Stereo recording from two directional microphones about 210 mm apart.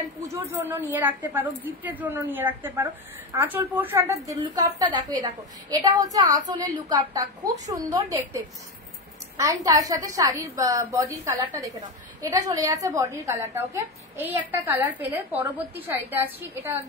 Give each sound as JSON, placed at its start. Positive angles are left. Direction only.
{"t": 0.3, "sound": "a woman's voice", "side_deg": -10}